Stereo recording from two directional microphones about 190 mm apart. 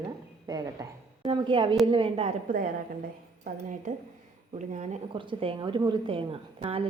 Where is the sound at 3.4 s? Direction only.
40° right (ahead or behind).